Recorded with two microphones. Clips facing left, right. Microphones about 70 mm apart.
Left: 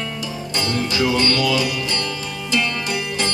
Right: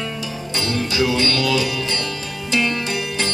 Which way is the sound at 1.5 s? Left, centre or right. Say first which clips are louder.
Even; right.